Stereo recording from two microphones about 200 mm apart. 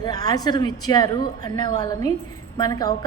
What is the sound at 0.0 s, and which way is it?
A woman's voice, 20° left (ahead or behind).